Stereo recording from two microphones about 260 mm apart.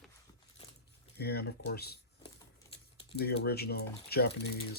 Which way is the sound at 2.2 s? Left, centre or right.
Left.